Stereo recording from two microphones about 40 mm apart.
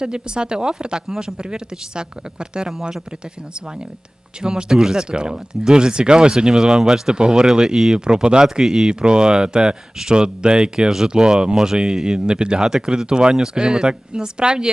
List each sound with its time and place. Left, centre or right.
0.0 s speech: right
1.0 s speech: centre
1.4 s speech: right
4.4 s speech: centre